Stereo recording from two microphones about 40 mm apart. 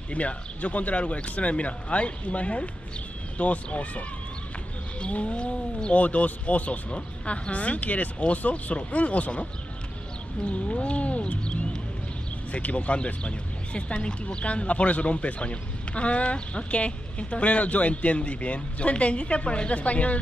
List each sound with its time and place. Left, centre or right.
0.1 s speech: left
5.0 s speech: left
5.9 s speech: left